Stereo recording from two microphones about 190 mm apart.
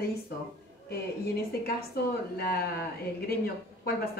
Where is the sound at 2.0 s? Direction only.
55° left (ahead or behind).